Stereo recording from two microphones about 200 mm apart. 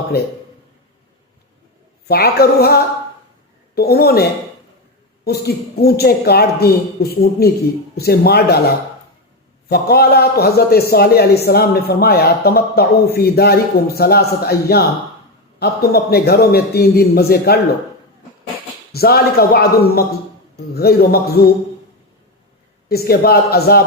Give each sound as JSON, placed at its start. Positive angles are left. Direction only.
{"t": 2.0, "sound": "a man's voice", "side_deg": 50}
{"t": 3.8, "sound": "a man's voice", "side_deg": 50}
{"t": 9.6, "sound": "a man's voice", "side_deg": 50}
{"t": 18.9, "sound": "a man's voice", "side_deg": 50}
{"t": 22.9, "sound": "a man's voice", "side_deg": 50}